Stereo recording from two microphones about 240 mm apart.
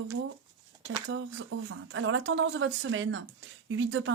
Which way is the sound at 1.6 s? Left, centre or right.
Right.